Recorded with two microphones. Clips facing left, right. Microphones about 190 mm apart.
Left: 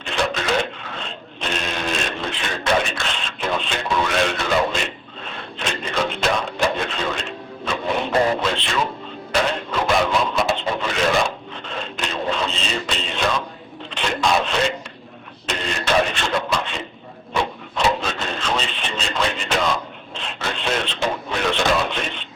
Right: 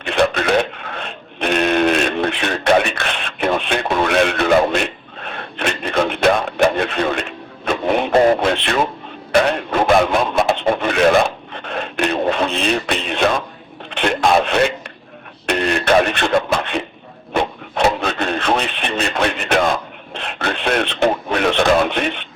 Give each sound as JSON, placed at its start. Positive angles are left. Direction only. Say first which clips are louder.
{"t": 0.0, "sound": "a sound", "louder": "right 7 dB", "side_deg": -60}
{"t": 8.6, "sound": "speech", "louder": "right 5 dB", "side_deg": -60}
{"t": 9.3, "sound": "radio", "louder": "right 6 dB", "side_deg": -60}
{"t": 13.9, "sound": "wail", "louder": "right 5 dB", "side_deg": -60}
{"t": 15.4, "sound": "radio", "louder": "right 7 dB", "side_deg": -65}
{"t": 20.1, "sound": "a sound", "louder": "right 5 dB", "side_deg": -60}